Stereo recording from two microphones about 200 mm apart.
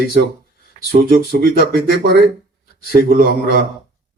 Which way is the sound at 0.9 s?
45° right (ahead or behind).